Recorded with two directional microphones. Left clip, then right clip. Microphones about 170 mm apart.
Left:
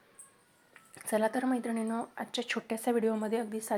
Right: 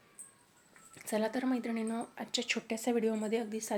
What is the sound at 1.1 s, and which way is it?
A woman's voice, 5° left (ahead or behind).